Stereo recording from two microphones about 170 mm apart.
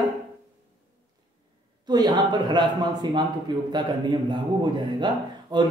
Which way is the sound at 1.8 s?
25° right (ahead or behind).